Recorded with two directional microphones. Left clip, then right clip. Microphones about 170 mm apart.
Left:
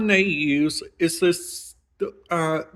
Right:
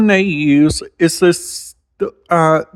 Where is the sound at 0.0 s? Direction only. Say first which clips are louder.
Right 6 dB; 45° right (ahead or behind).